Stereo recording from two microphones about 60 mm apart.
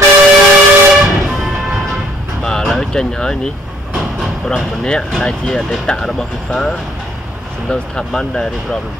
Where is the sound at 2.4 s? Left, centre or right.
Centre.